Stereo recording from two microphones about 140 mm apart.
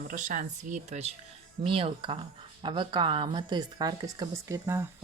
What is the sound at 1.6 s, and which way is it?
Speech, 40° right (ahead or behind).